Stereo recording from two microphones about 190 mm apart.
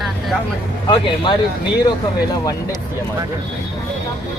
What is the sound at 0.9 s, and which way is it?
Speech, 25° left (ahead or behind).